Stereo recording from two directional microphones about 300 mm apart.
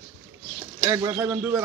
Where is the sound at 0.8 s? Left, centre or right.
Centre.